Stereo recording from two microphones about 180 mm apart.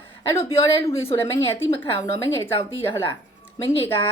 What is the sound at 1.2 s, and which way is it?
A woman's voice, 15° left (ahead or behind).